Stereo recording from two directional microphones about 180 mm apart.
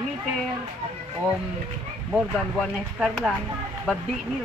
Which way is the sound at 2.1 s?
Centre (ahead or behind).